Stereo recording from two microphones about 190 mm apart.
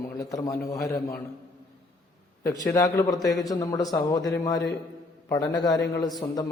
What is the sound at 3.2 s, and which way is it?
Speech, centre (ahead or behind).